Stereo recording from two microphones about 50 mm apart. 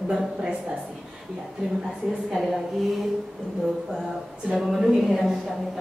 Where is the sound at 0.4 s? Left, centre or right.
Centre.